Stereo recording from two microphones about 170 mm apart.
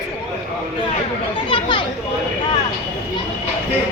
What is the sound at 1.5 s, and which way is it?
Children playing, 30° left (ahead or behind).